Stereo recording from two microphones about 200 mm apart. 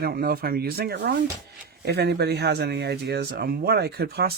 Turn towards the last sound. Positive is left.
turn(degrees=-55)  # may be behind; listen again after turning